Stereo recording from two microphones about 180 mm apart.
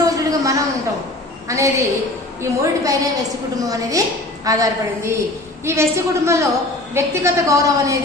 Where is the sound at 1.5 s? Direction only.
15° right (ahead or behind).